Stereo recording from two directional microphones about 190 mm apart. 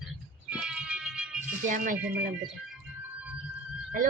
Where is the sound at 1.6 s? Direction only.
45° right (ahead or behind).